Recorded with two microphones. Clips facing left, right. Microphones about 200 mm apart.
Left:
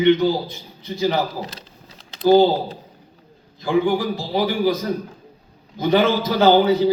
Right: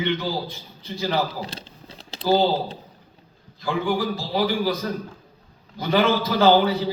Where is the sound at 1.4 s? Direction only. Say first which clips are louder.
Left 1 dB; 30° right (ahead or behind).